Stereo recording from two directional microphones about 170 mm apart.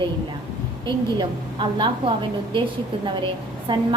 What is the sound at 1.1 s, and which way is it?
Speech, 25° right (ahead or behind).